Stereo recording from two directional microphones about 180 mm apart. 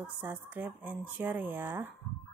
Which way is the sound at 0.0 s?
10° right (ahead or behind).